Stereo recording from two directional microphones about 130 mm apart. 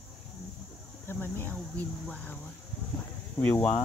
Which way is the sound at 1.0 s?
15° left (ahead or behind).